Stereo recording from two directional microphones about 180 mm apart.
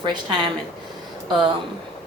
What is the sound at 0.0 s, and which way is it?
Speech, 25° right (ahead or behind).